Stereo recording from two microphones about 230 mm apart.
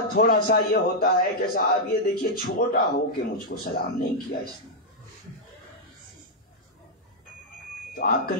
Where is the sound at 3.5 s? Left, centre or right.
Left.